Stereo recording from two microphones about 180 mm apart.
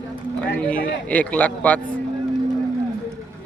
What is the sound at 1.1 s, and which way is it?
Speech, 5° left (ahead or behind).